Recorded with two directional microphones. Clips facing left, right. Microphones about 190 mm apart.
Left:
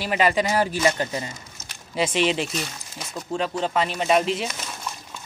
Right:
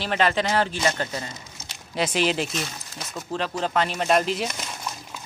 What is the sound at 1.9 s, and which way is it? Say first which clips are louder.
Speech: left 1 dB; centre (ahead or behind).